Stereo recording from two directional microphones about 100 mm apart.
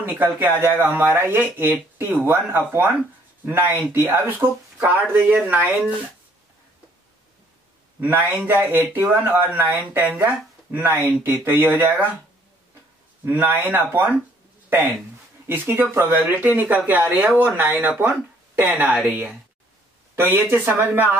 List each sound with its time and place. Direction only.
0.0 s speech: 20° right (ahead or behind)
8.0 s speech: 20° right (ahead or behind)
13.2 s speech: 20° right (ahead or behind)
15.4 s speech: 20° right (ahead or behind)